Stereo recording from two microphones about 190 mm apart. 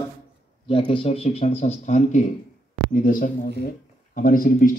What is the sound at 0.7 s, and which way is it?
Speech, 25° left (ahead or behind).